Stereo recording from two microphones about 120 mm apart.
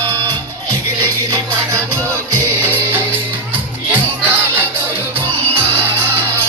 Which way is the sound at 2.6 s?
15° right (ahead or behind).